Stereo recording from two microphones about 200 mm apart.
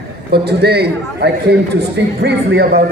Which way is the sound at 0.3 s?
55° right (ahead or behind).